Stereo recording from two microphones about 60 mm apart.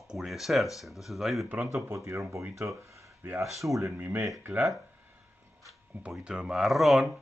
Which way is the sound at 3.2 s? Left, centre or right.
Right.